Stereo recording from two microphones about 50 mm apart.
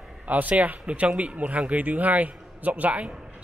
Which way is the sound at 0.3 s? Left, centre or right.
Right.